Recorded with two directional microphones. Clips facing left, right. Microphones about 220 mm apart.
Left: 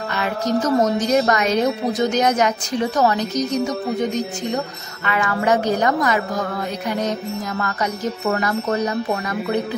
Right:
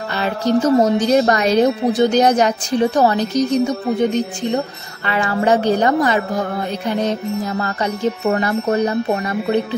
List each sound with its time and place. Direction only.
0.1 s a woman's voice: 30° right (ahead or behind)